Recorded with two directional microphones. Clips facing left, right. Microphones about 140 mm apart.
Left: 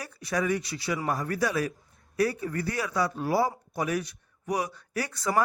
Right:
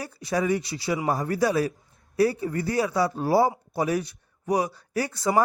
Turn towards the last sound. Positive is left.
turn(degrees=-25)  # may be behind; listen again after turning